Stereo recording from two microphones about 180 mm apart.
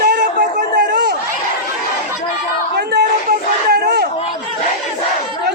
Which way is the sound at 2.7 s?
60° right (ahead or behind).